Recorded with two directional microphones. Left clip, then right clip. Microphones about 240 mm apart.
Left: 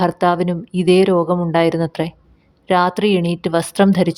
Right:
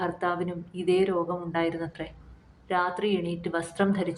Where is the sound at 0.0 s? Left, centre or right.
Left.